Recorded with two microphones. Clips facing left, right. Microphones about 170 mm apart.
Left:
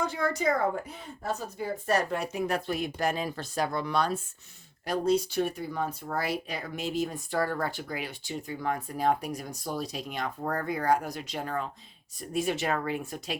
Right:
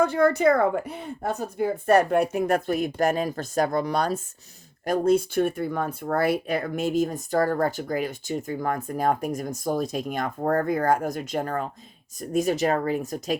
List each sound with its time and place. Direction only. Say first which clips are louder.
0.0 s speech: right 9 dB; 60° right (ahead or behind); by 13.4 s 40° right (ahead or behind)